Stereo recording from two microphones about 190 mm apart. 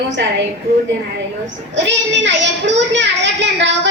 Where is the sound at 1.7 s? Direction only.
70° right (ahead or behind).